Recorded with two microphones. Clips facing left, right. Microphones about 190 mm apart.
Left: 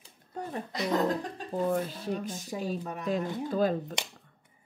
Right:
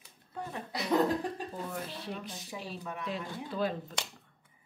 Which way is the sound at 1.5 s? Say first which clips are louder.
Left 10 dB; 45° left (ahead or behind).